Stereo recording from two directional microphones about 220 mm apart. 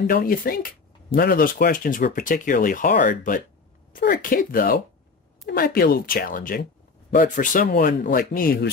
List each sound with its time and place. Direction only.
0.0 s a woman's voice: 40° left (ahead or behind)